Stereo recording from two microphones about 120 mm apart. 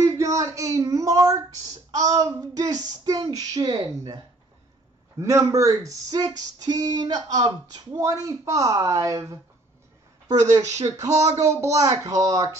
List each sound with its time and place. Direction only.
0.0 s speech: 25° right (ahead or behind)
1.9 s a sound: 30° right (ahead or behind)
5.2 s speech: 25° right (ahead or behind)
10.6 s speech: 70° right (ahead or behind)
11.3 s speech: 25° right (ahead or behind)